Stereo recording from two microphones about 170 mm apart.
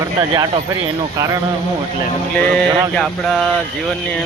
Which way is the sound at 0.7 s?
20° right (ahead or behind).